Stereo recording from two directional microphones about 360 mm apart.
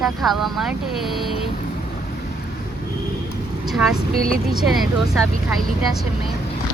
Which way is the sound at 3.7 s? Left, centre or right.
Centre.